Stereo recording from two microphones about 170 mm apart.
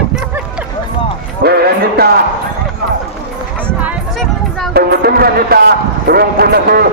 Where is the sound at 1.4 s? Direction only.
65° right (ahead or behind).